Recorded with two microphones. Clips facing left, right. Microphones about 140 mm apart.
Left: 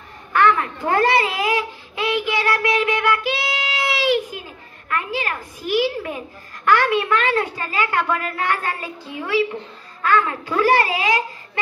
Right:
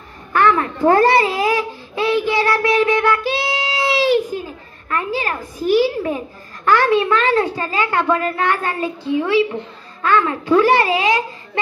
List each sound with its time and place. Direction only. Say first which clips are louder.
0.3 s babbling: right 2 dB; 35° right (ahead or behind)
4.8 s a child's voice: right 3 dB; 30° right (ahead or behind)